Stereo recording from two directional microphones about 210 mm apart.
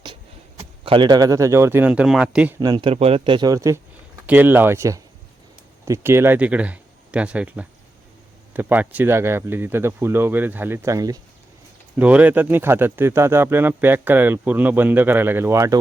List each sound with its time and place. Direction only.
0.9 s speech: 20° right (ahead or behind); by 2.6 s 5° right (ahead or behind)
2.6 s speech: 20° right (ahead or behind)